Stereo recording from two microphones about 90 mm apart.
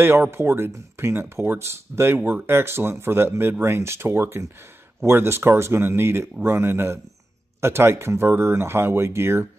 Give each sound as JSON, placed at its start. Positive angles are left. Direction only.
{"t": 0.0, "sound": "speech", "side_deg": -25}